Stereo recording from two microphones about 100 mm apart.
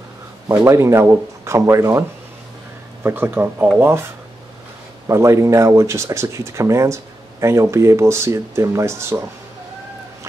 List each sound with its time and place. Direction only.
0.7 s speech: 30° right (ahead or behind)
5.0 s speech: 30° right (ahead or behind)